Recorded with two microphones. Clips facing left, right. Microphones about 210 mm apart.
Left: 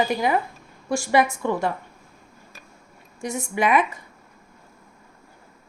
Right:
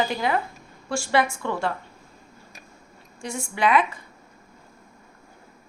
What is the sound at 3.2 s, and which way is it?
Speech, 20° left (ahead or behind).